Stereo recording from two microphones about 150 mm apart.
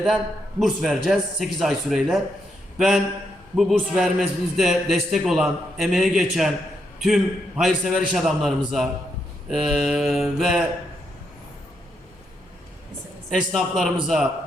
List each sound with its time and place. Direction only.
0.6 s a man's voice: centre (ahead or behind)
13.3 s a man's voice: centre (ahead or behind)